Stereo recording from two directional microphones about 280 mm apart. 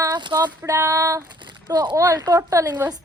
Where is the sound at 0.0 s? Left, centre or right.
Centre.